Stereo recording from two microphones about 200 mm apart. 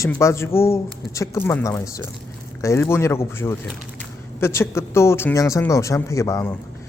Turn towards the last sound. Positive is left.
turn(degrees=15)  # may be behind; listen again after turning